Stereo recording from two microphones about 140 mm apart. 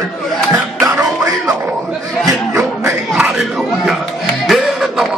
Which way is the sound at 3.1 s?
5° right (ahead or behind).